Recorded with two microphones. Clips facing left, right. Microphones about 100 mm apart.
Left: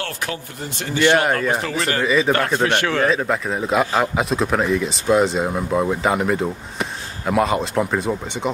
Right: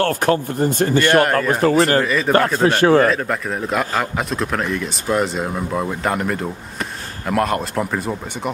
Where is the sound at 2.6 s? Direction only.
25° right (ahead or behind).